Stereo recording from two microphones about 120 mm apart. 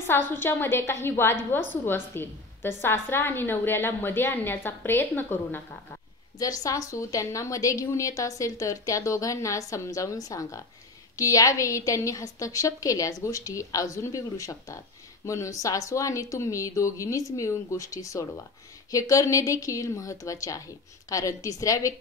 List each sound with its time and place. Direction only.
0.0 s a woman's voice: 20° left (ahead or behind)
6.4 s a woman's voice: 30° left (ahead or behind)